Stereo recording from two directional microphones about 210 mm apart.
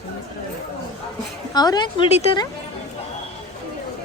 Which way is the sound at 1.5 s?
20° left (ahead or behind).